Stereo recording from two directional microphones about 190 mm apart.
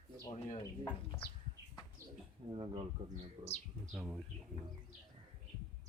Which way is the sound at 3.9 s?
Centre (ahead or behind).